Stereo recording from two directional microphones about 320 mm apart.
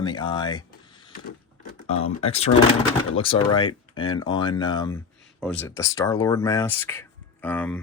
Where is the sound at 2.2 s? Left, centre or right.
Centre.